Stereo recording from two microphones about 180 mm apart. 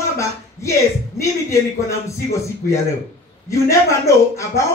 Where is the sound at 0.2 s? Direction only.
15° left (ahead or behind).